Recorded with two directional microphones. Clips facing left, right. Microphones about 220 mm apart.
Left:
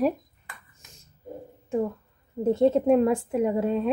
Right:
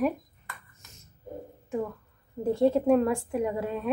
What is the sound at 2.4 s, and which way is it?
A woman's voice, 20° left (ahead or behind).